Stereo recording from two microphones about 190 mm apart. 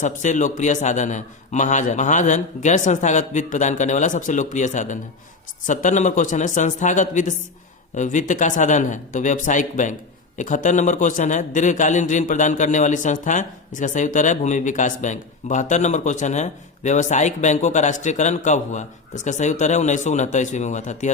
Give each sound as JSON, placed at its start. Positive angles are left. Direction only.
{"t": 0.0, "sound": "a man's voice", "side_deg": 40}